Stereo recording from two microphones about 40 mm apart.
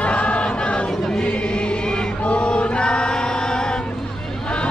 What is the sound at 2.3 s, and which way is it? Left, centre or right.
Choir, left.